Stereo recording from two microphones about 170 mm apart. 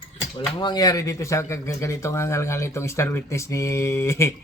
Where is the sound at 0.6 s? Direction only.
25° left (ahead or behind).